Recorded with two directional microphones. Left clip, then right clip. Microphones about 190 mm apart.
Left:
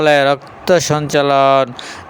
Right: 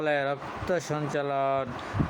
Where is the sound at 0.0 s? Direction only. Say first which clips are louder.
Left 16 dB; 50° left (ahead or behind).